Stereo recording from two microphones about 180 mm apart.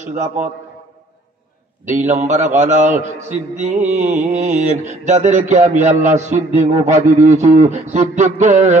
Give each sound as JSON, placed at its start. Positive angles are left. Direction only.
{"t": 0.0, "sound": "mantra", "side_deg": -40}
{"t": 1.9, "sound": "mantra", "side_deg": -40}